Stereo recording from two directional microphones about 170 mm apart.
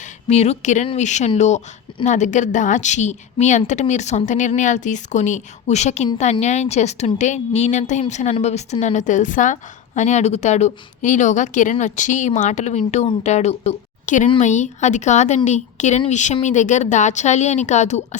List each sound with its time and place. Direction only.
0.3 s a woman's voice: 40° left (ahead or behind)